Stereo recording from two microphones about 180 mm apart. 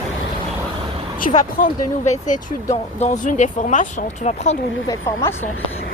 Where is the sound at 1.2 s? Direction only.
45° left (ahead or behind).